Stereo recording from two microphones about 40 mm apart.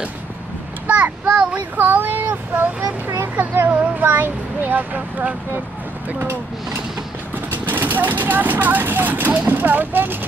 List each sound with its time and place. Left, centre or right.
0.8 s child singing: right
1.3 s child singing: right
1.8 s a sound: right
3.3 s speech: right
7.5 s speech: right